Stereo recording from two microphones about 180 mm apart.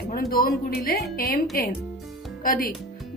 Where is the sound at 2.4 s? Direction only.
50° left (ahead or behind).